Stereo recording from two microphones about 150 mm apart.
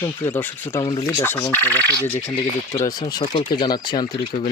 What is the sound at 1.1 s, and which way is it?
Speech, 15° left (ahead or behind).